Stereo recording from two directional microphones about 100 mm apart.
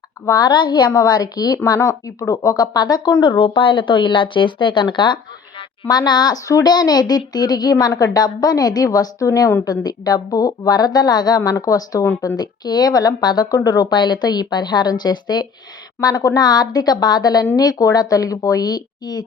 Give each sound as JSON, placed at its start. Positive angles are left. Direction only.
{"t": 0.3, "sound": "a woman's voice", "side_deg": 45}